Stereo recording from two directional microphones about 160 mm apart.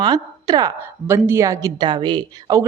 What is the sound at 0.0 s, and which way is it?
A woman's voice, 25° right (ahead or behind).